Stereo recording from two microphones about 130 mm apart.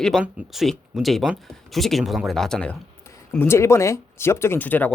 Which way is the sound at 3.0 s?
20° left (ahead or behind).